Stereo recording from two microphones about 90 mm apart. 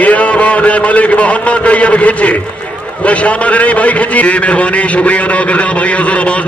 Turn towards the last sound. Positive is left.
turn(degrees=15)  # may be behind; listen again after turning